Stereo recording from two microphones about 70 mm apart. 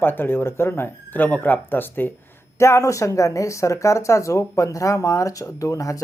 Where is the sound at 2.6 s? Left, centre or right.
Left.